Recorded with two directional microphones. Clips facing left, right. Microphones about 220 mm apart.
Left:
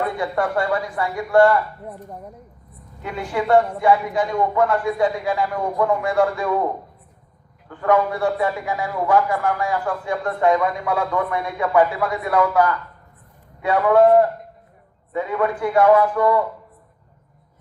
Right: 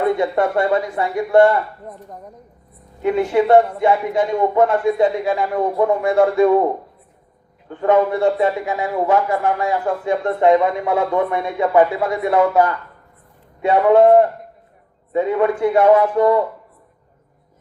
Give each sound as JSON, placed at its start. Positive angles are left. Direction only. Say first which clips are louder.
{"t": 0.0, "sound": "a man's voice", "louder": "right 5 dB", "side_deg": -25}
{"t": 1.9, "sound": "speech", "louder": "left 1 dB", "side_deg": 10}
{"t": 3.0, "sound": "a man's voice", "louder": "right 9 dB", "side_deg": -25}
{"t": 7.7, "sound": "a man's voice", "louder": "right 3 dB", "side_deg": -25}